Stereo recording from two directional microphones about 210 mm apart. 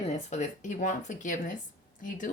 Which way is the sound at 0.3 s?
35° left (ahead or behind).